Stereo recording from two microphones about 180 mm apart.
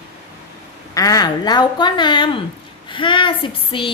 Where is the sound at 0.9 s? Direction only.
20° left (ahead or behind).